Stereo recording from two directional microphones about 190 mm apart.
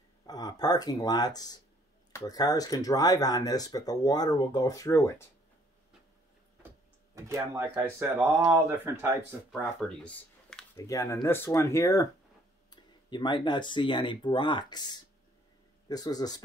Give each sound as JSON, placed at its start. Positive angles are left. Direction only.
{"t": 0.3, "sound": "speech", "side_deg": 20}
{"t": 7.2, "sound": "speech", "side_deg": -15}
{"t": 9.5, "sound": "speech", "side_deg": 5}
{"t": 10.8, "sound": "speech", "side_deg": 15}
{"t": 13.1, "sound": "speech", "side_deg": 25}